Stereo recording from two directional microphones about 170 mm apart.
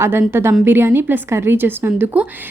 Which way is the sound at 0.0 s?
15° right (ahead or behind).